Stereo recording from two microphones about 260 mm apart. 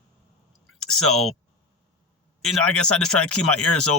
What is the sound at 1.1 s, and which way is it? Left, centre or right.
Speech, centre.